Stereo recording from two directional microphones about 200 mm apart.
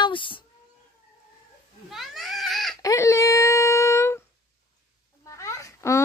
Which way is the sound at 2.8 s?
15° left (ahead or behind).